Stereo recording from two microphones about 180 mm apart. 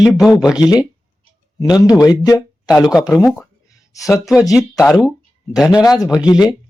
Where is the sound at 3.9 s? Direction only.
20° left (ahead or behind).